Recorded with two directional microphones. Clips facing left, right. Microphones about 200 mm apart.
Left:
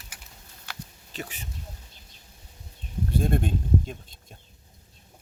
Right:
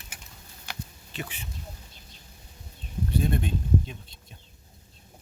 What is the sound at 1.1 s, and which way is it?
Speech, 40° left (ahead or behind).